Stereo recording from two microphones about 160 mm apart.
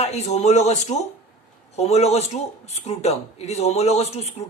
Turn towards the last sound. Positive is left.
turn(degrees=40)  # may be behind; listen again after turning